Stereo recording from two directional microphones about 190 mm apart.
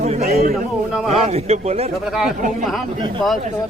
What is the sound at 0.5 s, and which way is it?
Speech, centre (ahead or behind).